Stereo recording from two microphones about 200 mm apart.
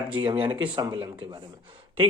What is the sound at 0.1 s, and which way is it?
Speech, 25° right (ahead or behind).